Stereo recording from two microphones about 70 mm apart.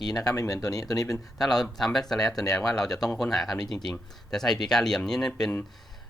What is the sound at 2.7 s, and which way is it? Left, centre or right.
Speech, centre.